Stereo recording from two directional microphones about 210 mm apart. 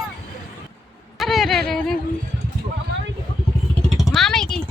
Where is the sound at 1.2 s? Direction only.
Centre (ahead or behind).